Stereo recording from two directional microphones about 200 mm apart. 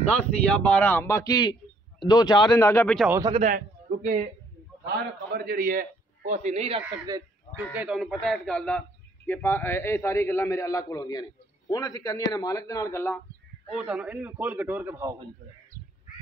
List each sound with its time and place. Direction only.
0.1 s a man's voice: 5° left (ahead or behind)
3.3 s a man's voice: 35° right (ahead or behind)
4.8 s a man's voice: 50° right (ahead or behind); by 7.2 s 20° right (ahead or behind)
7.7 s a man's voice: 5° right (ahead or behind); by 13.2 s 15° left (ahead or behind)
13.7 s a man's voice: 5° right (ahead or behind)